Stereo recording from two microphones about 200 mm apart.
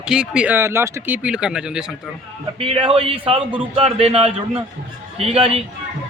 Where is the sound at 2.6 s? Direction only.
30° right (ahead or behind).